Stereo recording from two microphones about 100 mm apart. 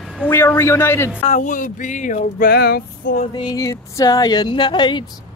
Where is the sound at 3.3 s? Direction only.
45° left (ahead or behind).